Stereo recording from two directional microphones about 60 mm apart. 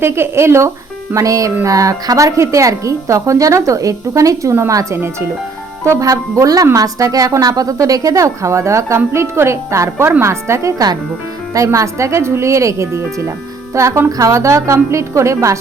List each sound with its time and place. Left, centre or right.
0.0 s a woman's voice: right
1.1 s a woman's voice: right
6.0 s a woman's voice: right
6.7 s a woman's voice: right
9.1 s a woman's voice: right
10.1 s a woman's voice: right
11.5 s a woman's voice: right
14.2 s speech: right